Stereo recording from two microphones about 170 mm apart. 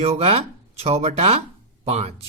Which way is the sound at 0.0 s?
35° right (ahead or behind).